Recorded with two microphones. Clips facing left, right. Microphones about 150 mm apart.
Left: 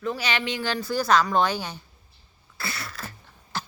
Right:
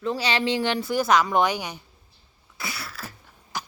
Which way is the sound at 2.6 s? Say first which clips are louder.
Even; 10° right (ahead or behind).